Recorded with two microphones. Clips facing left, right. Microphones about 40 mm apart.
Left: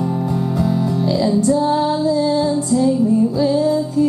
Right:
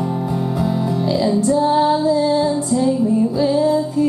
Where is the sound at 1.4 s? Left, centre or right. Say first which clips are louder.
Right 1 dB; centre.